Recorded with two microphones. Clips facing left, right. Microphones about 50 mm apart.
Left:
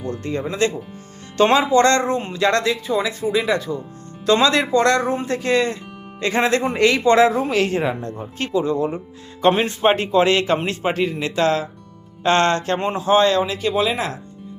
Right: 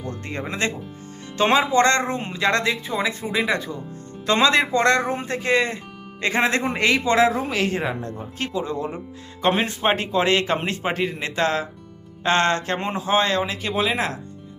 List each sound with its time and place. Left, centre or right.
0.2 s speech: right
1.4 s a man's voice: centre
8.7 s speech: centre
9.4 s a man's voice: centre
13.1 s speech: centre